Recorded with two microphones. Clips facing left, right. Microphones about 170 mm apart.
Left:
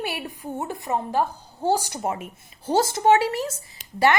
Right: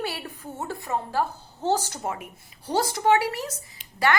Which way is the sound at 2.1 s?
25° left (ahead or behind).